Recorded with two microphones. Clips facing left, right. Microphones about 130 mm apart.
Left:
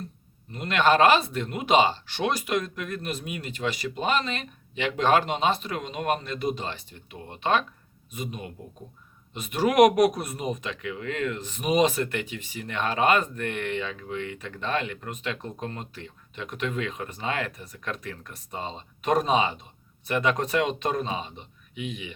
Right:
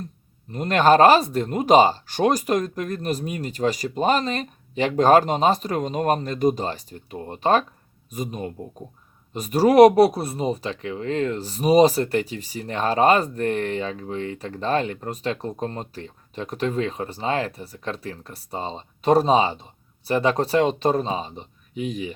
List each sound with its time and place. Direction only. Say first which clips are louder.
0.5 s speech: right 5 dB; 40° right (ahead or behind)